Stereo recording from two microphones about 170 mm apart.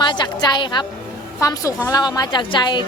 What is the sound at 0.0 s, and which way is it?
A woman's voice, 30° left (ahead or behind).